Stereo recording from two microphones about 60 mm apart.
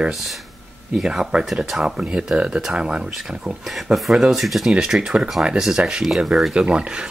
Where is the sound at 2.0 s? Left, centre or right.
Centre.